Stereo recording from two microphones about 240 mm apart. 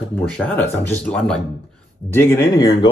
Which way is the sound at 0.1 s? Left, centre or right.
Centre.